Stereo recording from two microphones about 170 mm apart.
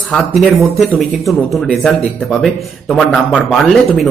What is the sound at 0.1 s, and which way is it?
Speech, centre (ahead or behind).